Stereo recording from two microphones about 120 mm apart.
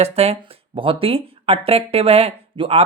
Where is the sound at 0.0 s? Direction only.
60° right (ahead or behind).